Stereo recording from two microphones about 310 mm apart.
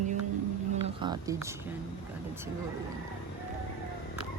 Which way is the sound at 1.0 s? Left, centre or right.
Centre.